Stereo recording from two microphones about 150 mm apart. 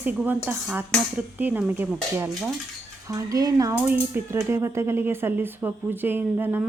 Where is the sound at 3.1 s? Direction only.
25° right (ahead or behind).